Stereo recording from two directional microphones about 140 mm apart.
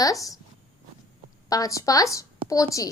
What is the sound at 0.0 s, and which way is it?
Speech, 25° left (ahead or behind).